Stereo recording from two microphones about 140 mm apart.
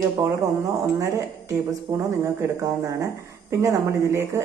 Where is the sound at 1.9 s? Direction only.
25° right (ahead or behind).